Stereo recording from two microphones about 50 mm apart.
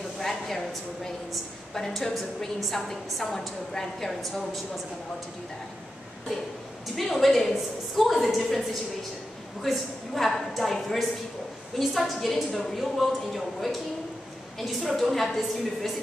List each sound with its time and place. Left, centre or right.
0.2 s a sound: centre
1.3 s a woman's voice: centre
7.0 s a woman's voice: centre